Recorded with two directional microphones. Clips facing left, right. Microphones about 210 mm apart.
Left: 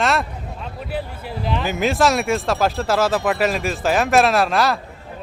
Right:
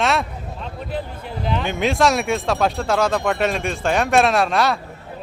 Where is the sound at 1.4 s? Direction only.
Centre (ahead or behind).